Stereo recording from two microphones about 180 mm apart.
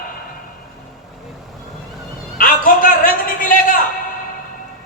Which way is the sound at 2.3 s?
50° left (ahead or behind).